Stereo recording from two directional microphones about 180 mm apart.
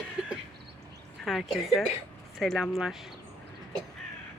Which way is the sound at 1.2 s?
Centre (ahead or behind).